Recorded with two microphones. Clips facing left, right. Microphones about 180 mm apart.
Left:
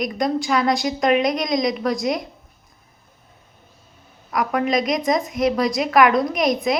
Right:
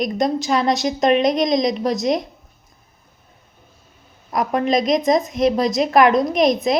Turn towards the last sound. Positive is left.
turn(degrees=-25)  # may be behind; listen again after turning